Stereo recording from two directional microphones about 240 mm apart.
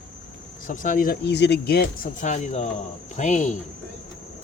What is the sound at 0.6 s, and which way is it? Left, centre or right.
Speech, left.